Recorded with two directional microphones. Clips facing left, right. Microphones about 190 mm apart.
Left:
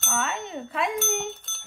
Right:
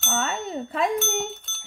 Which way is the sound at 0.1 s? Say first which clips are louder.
Right 2 dB; 35° right (ahead or behind).